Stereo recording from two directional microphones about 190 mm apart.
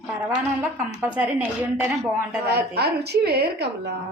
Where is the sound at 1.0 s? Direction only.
10° right (ahead or behind).